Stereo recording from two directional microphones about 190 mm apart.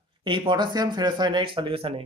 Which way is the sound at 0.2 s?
25° right (ahead or behind).